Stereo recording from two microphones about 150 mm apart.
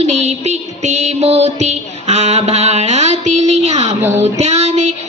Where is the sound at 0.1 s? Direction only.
50° right (ahead or behind).